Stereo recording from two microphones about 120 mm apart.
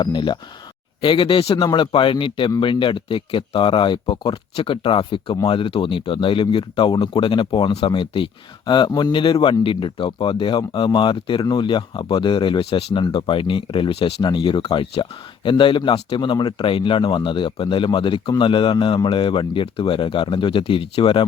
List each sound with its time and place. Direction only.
0.0 s a man's voice: 40° left (ahead or behind)